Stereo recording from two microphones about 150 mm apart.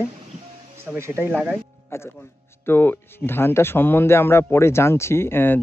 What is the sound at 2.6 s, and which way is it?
Speech, 15° left (ahead or behind).